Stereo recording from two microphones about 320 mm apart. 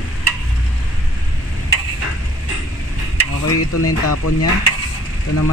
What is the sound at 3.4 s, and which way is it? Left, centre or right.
Speech, left.